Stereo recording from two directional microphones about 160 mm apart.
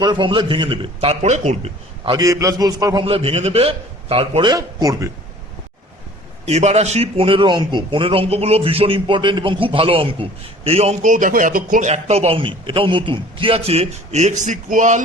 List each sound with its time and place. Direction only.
0.0 s a man's voice: 30° right (ahead or behind); by 1.7 s 45° right (ahead or behind)
2.0 s a man's voice: 20° right (ahead or behind)
4.5 s speech: 20° right (ahead or behind)
6.4 s a man's voice: 45° right (ahead or behind)
11.1 s a man's voice: 55° right (ahead or behind)